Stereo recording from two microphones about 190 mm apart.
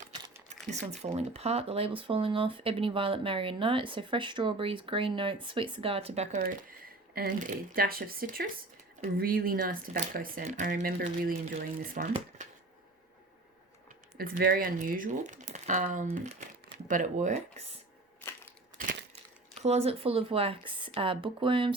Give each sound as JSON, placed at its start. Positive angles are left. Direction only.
{"t": 0.7, "sound": "speech", "side_deg": -35}
{"t": 6.4, "sound": "a sound", "side_deg": -50}
{"t": 7.5, "sound": "speech", "side_deg": -50}
{"t": 10.7, "sound": "speech", "side_deg": -60}
{"t": 14.2, "sound": "speech", "side_deg": -50}
{"t": 19.5, "sound": "speech", "side_deg": -35}